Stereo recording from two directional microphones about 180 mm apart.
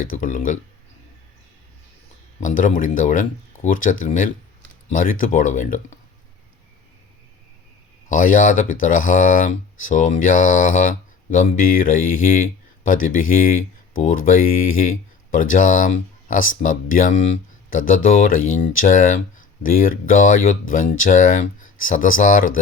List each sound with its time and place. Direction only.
0.1 s speech: 45° left (ahead or behind)
2.4 s speech: 45° left (ahead or behind)
8.1 s speech: 45° left (ahead or behind)